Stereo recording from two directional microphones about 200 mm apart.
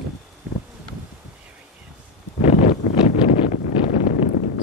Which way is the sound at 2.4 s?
35° left (ahead or behind).